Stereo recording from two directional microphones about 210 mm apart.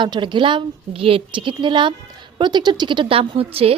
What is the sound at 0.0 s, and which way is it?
A woman's voice, 20° right (ahead or behind).